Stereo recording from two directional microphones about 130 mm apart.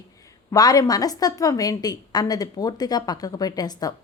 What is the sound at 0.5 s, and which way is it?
A woman's voice, 25° left (ahead or behind).